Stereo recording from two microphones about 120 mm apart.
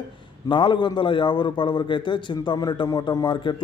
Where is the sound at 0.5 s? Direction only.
40° left (ahead or behind).